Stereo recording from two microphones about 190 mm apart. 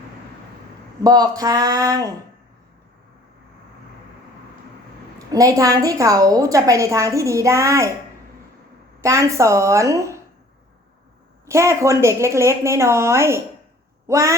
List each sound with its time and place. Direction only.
1.0 s speech: 20° right (ahead or behind)
5.3 s a woman's voice: 20° right (ahead or behind)
9.0 s a woman's voice: 15° right (ahead or behind)
11.4 s a woman's voice: 15° right (ahead or behind)